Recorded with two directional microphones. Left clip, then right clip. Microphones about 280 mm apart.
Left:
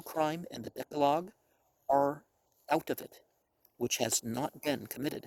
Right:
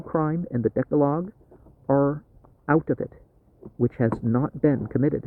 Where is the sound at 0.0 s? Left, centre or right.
Left.